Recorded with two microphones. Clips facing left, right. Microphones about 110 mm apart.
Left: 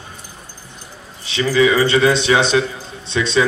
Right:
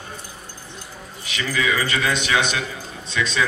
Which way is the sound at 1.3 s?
30° left (ahead or behind).